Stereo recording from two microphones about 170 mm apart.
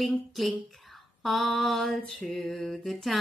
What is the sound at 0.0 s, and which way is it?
Speech, centre (ahead or behind).